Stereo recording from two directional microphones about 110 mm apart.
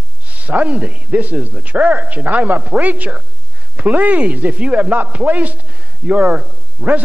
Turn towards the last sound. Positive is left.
turn(degrees=-15)  # may be behind; listen again after turning